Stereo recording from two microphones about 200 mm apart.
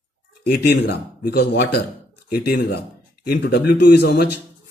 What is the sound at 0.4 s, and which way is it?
Speech, 55° left (ahead or behind).